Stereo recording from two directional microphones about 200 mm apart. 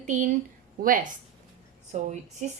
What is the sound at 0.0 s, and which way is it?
A woman's voice, 40° right (ahead or behind).